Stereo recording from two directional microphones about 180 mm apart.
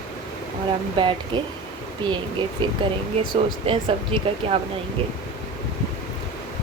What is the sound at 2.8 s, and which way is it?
A woman's voice, 25° right (ahead or behind).